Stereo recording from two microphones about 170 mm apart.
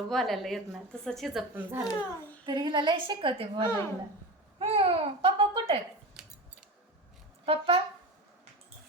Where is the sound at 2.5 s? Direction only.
25° right (ahead or behind).